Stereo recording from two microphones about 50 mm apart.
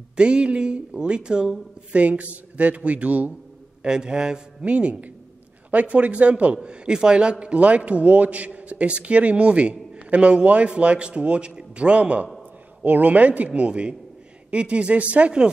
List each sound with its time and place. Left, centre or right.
0.1 s a man's voice: centre
3.8 s a man's voice: centre